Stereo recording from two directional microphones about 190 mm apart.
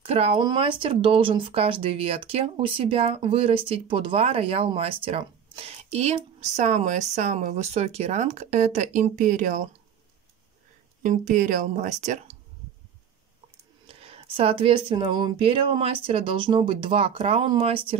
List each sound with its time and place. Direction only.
0.0 s speech: 30° right (ahead or behind)
11.0 s speech: 40° right (ahead or behind)
13.8 s speech: 30° right (ahead or behind)